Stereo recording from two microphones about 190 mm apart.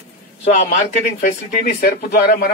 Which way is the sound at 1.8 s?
55° left (ahead or behind).